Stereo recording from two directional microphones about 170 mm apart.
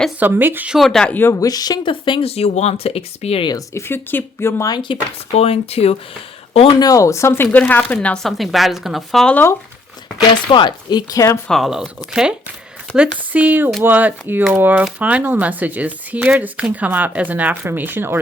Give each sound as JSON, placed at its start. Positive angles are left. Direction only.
{"t": 0.2, "sound": "speech", "side_deg": -10}
{"t": 3.5, "sound": "speech", "side_deg": 15}
{"t": 6.7, "sound": "speech", "side_deg": 20}
{"t": 10.5, "sound": "speech", "side_deg": 25}
{"t": 11.4, "sound": "speech", "side_deg": 0}